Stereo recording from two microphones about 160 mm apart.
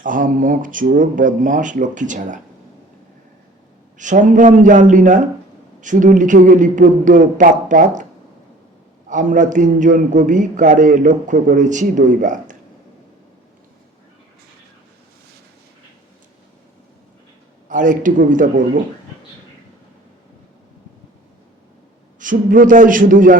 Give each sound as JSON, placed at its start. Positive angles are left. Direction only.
{"t": 0.0, "sound": "speech", "side_deg": -55}
{"t": 3.9, "sound": "a man's voice", "side_deg": -50}
{"t": 9.0, "sound": "a man's voice", "side_deg": -50}
{"t": 17.7, "sound": "speech", "side_deg": -55}
{"t": 22.2, "sound": "speech", "side_deg": -55}